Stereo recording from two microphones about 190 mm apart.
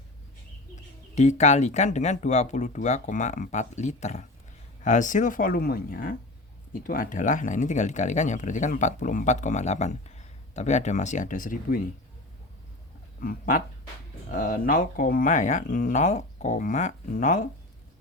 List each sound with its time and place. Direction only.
1.1 s speech: 40° left (ahead or behind)
13.2 s speech: 45° left (ahead or behind)